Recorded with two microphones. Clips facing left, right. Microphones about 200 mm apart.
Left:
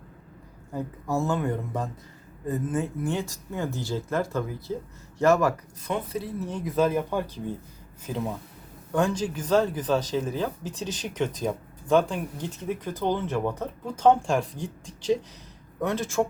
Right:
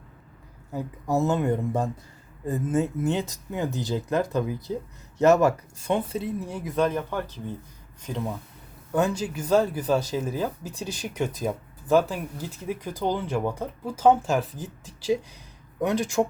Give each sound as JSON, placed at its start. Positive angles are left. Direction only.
{"t": 0.7, "sound": "speech", "side_deg": -5}
{"t": 1.1, "sound": "speech", "side_deg": -20}
{"t": 6.4, "sound": "speech", "side_deg": -5}
{"t": 8.9, "sound": "speech", "side_deg": -10}